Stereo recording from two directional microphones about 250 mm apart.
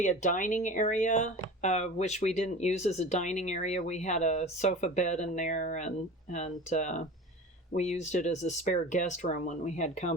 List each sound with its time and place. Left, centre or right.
0.0 s speech: left